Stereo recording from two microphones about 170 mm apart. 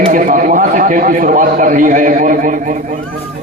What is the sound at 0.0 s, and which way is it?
A man's voice, 50° right (ahead or behind).